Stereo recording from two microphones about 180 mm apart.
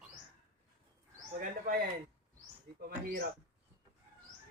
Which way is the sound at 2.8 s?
60° right (ahead or behind).